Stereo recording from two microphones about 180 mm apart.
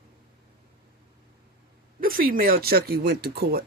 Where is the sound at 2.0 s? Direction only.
55° right (ahead or behind).